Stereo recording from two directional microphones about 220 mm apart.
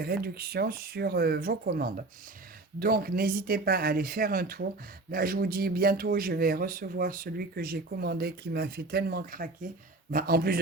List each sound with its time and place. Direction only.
0.0 s speech: 45° right (ahead or behind)